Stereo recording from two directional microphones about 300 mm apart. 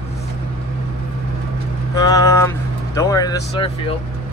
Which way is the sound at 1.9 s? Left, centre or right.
Centre.